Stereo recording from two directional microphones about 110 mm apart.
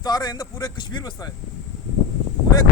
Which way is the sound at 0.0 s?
35° left (ahead or behind).